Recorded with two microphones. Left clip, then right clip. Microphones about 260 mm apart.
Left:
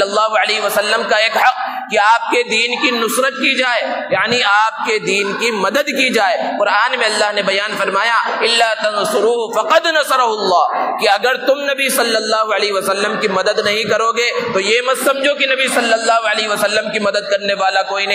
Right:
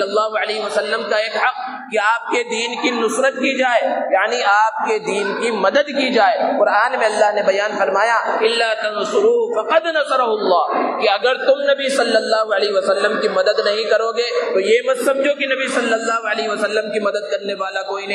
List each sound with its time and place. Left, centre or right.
0.1 s a man's voice: left
9.7 s a man's voice: left